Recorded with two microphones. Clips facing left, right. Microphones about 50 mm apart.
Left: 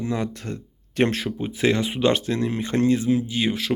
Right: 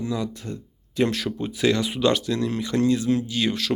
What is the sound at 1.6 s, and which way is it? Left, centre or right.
Speech, left.